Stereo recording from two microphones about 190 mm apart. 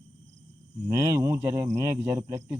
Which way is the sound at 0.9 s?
15° right (ahead or behind).